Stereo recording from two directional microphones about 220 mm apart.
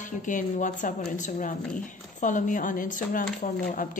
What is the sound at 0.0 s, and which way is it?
Speech, 35° left (ahead or behind).